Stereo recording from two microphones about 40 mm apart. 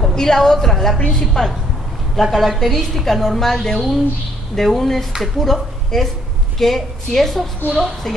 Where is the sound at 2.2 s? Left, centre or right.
Centre.